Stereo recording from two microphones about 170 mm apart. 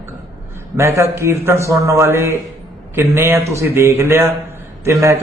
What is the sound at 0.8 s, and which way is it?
A man's voice, 15° right (ahead or behind).